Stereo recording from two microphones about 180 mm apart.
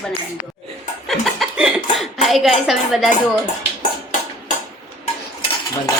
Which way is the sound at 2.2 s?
Centre (ahead or behind).